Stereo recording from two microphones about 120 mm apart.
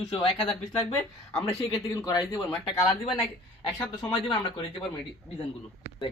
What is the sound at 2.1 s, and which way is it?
Speech, 30° left (ahead or behind).